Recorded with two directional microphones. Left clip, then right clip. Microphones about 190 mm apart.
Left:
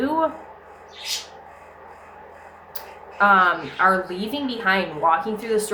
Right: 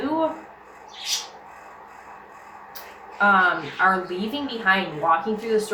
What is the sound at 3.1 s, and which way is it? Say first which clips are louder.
Speech: left 2 dB; 35° left (ahead or behind).